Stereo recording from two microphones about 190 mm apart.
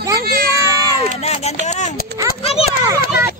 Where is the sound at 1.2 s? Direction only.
35° left (ahead or behind).